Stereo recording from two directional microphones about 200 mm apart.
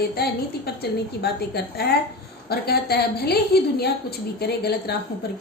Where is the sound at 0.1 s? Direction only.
50° left (ahead or behind).